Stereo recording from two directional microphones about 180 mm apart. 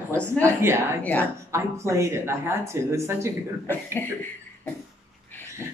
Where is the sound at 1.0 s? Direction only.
10° left (ahead or behind).